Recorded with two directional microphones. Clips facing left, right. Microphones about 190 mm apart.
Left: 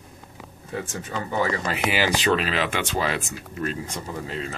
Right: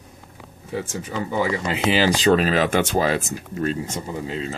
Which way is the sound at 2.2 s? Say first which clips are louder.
Right 5 dB; 40° right (ahead or behind).